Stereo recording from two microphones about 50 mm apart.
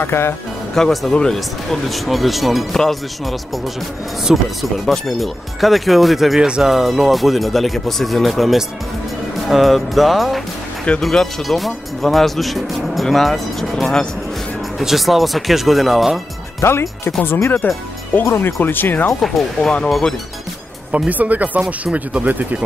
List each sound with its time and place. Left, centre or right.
0.0 s speech: left
0.7 s speech: centre
14.8 s speech: centre
16.6 s speech: left
17.2 s speech: left
19.2 s speech: centre
21.1 s speech: right